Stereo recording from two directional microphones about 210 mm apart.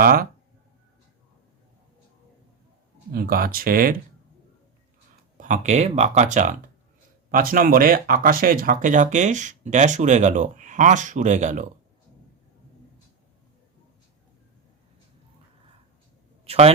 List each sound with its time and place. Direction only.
0.0 s speech: 45° right (ahead or behind)
3.1 s speech: 45° right (ahead or behind)
5.4 s speech: 35° right (ahead or behind)
16.5 s speech: 30° right (ahead or behind)